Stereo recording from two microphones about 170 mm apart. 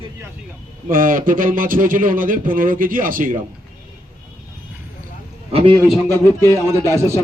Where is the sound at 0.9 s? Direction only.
55° right (ahead or behind).